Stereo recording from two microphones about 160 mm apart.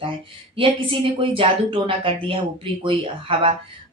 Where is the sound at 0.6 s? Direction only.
35° right (ahead or behind).